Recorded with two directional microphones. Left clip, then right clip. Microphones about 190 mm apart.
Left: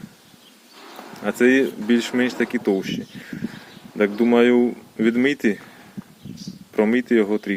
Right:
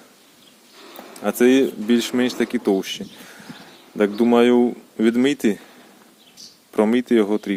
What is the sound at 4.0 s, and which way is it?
Speech, 20° right (ahead or behind).